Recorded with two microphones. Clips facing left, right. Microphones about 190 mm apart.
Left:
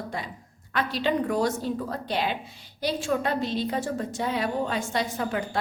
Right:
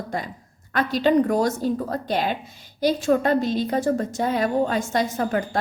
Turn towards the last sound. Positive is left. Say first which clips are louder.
# right 5 dB
turn(degrees=-45)  # may be behind; listen again after turning